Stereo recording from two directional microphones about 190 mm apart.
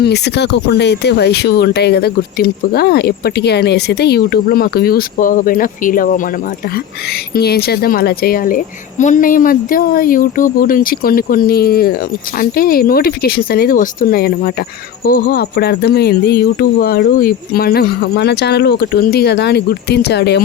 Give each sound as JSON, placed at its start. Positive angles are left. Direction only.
{"t": 0.0, "sound": "speech", "side_deg": 60}
{"t": 7.3, "sound": "speech", "side_deg": 55}